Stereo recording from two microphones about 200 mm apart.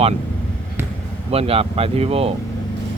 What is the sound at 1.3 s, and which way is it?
Speech, 30° right (ahead or behind).